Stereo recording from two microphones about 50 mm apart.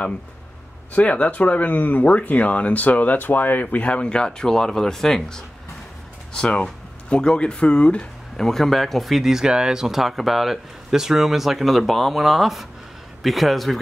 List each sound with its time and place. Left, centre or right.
0.9 s speech: left; by 5.4 s centre
6.5 s speech: left
8.4 s speech: centre